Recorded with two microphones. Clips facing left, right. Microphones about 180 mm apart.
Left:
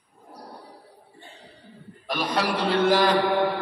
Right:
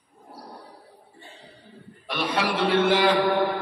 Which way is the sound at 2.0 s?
40° left (ahead or behind).